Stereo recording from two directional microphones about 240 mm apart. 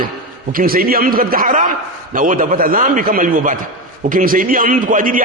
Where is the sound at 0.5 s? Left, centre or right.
Right.